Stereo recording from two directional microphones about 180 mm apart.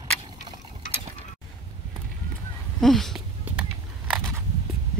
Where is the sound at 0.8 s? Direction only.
45° left (ahead or behind).